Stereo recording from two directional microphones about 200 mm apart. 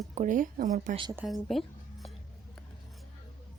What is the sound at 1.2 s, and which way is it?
Speech, centre (ahead or behind).